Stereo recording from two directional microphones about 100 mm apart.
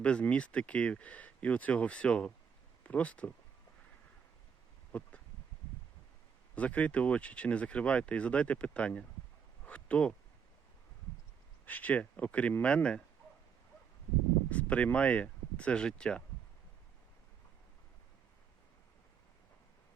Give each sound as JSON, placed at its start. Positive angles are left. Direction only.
{"t": 0.0, "sound": "speech", "side_deg": 10}
{"t": 4.9, "sound": "a sound", "side_deg": 15}
{"t": 6.6, "sound": "speech", "side_deg": 15}
{"t": 9.6, "sound": "a sound", "side_deg": 10}
{"t": 11.6, "sound": "speech", "side_deg": 15}
{"t": 14.5, "sound": "speech", "side_deg": 15}